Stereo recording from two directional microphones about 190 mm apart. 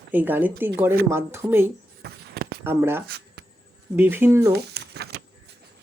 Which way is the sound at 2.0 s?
55° right (ahead or behind).